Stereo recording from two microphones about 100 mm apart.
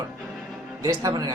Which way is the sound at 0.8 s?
35° right (ahead or behind).